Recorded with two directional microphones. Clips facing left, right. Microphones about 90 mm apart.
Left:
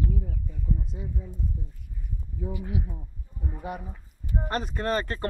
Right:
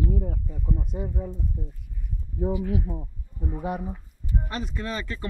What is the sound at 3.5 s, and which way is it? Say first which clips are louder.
Speech: right 6 dB; 25° right (ahead or behind).